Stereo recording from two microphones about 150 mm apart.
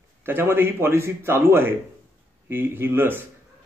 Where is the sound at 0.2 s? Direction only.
15° right (ahead or behind).